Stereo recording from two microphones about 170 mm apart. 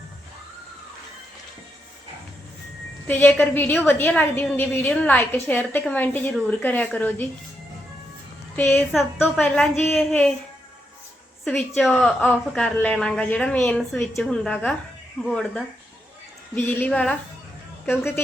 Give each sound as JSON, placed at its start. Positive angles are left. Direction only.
{"t": 3.1, "sound": "a woman's voice", "side_deg": 10}
{"t": 8.5, "sound": "a woman's voice", "side_deg": 10}
{"t": 9.1, "sound": "a woman's voice", "side_deg": 0}
{"t": 9.4, "sound": "a woman's voice", "side_deg": 10}
{"t": 11.4, "sound": "a woman's voice", "side_deg": 5}